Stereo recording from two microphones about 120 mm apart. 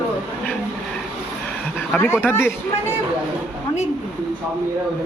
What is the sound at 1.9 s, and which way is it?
Speech, 20° left (ahead or behind).